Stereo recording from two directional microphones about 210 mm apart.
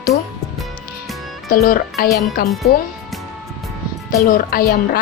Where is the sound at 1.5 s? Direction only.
40° left (ahead or behind).